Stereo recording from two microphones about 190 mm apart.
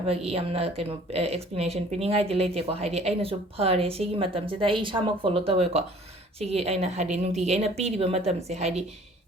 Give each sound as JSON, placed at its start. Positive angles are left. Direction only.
{"t": 0.1, "sound": "speech", "side_deg": -30}